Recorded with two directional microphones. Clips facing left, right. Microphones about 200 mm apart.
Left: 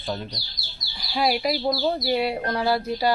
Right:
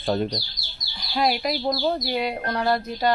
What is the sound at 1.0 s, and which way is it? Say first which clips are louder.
Speech: even; 5° left (ahead or behind).